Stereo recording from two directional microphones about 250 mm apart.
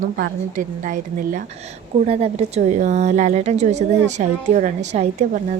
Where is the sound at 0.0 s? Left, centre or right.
Right.